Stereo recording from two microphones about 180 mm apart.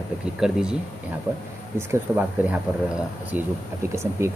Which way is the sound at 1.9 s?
10° right (ahead or behind).